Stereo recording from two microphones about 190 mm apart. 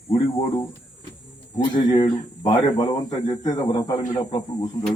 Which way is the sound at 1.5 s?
25° left (ahead or behind).